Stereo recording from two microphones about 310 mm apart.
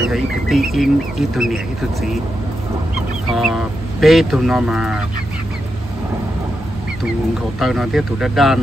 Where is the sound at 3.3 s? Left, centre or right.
Centre.